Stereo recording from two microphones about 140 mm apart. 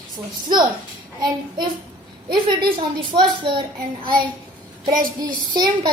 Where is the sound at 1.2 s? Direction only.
30° right (ahead or behind).